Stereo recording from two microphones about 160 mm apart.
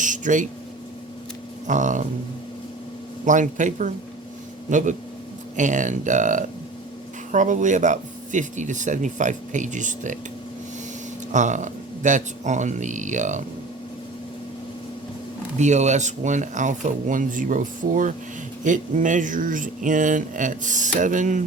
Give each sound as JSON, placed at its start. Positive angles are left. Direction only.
{"t": 0.0, "sound": "a sound", "side_deg": -50}
{"t": 1.6, "sound": "speech", "side_deg": -50}
{"t": 3.2, "sound": "speech", "side_deg": -50}
{"t": 11.3, "sound": "speech", "side_deg": -50}
{"t": 15.5, "sound": "speech", "side_deg": -45}